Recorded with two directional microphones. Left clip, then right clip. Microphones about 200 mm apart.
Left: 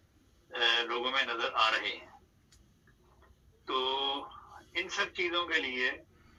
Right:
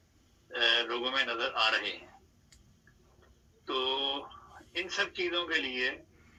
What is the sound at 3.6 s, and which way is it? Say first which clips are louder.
Speech: even; 10° right (ahead or behind).